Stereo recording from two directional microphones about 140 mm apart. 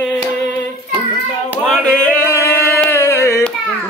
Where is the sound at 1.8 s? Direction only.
15° left (ahead or behind).